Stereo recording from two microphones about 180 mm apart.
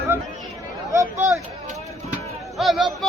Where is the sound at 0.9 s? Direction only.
15° right (ahead or behind).